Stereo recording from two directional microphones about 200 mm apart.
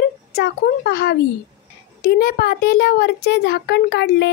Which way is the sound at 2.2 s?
50° left (ahead or behind).